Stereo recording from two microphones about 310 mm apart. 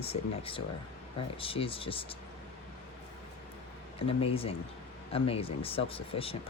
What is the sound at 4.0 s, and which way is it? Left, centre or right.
Speech, centre.